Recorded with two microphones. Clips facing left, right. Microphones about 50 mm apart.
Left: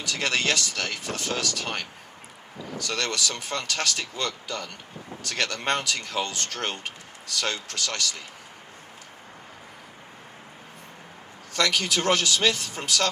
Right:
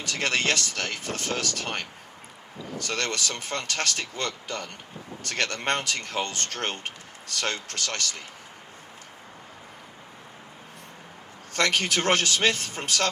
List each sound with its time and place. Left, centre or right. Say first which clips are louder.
0.0 s speech: even; right
11.5 s speech: even; right